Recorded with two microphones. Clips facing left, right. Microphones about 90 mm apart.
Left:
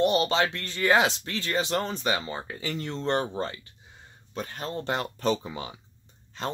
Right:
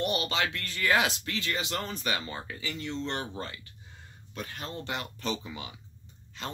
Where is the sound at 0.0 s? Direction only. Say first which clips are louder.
Left 7 dB; 30° left (ahead or behind).